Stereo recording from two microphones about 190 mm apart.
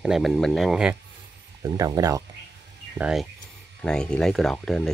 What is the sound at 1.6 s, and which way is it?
Speech, 20° right (ahead or behind).